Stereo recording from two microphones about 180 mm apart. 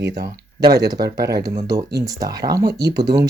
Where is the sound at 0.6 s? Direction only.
20° right (ahead or behind).